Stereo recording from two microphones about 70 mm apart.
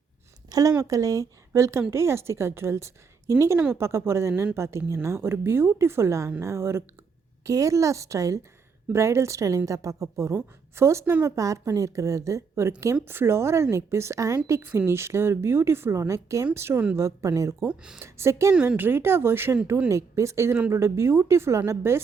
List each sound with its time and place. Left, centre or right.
0.8 s a woman's voice: right
7.4 s a woman's voice: right
17.7 s speech: centre
18.0 s a woman's voice: right
19.9 s a woman's voice: right